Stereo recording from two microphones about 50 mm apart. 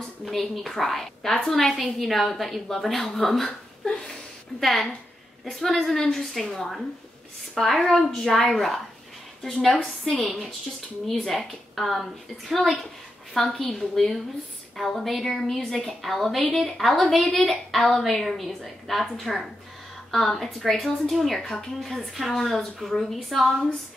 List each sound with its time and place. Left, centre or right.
0.2 s a woman's voice: centre
4.6 s a woman's voice: centre
9.8 s a woman's voice: left
11.1 s a woman's voice: centre